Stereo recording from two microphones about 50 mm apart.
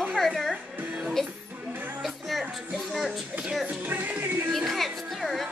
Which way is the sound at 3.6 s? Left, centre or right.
Right.